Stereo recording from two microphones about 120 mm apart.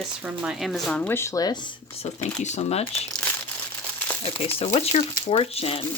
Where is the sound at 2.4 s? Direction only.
65° left (ahead or behind).